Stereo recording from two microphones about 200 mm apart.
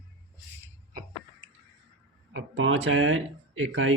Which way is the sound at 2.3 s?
75° right (ahead or behind).